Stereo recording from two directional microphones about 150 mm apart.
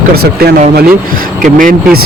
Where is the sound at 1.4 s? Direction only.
65° right (ahead or behind).